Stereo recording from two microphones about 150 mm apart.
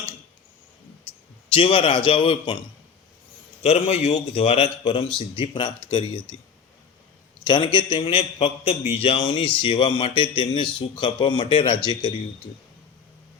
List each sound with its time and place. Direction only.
1.1 s a sound: 40° left (ahead or behind)
1.5 s speech: 40° left (ahead or behind)
3.6 s speech: 45° left (ahead or behind)
7.4 s speech: 30° left (ahead or behind)